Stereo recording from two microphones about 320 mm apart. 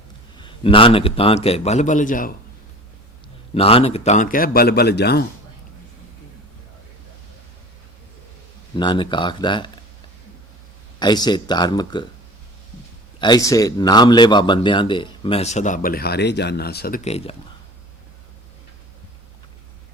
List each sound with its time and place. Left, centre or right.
0.3 s a man's voice: centre
3.5 s a man's voice: centre
8.8 s a man's voice: centre
11.0 s a man's voice: centre
13.1 s a man's voice: centre